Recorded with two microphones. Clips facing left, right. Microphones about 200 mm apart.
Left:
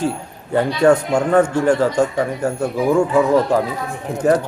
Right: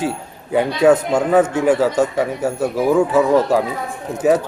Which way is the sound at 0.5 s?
5° right (ahead or behind).